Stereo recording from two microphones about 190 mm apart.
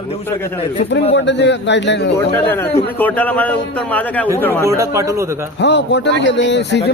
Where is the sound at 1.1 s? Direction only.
65° left (ahead or behind).